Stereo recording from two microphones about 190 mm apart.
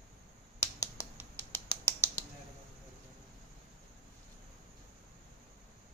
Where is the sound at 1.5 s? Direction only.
15° left (ahead or behind).